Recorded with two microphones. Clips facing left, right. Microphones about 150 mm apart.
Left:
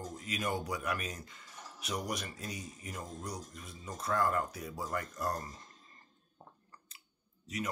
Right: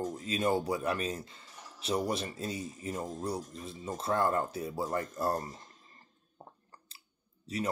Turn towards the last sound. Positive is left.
turn(degrees=-30)  # may be behind; listen again after turning